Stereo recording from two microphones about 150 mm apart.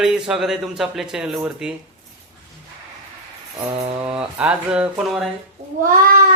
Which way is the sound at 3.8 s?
40° right (ahead or behind).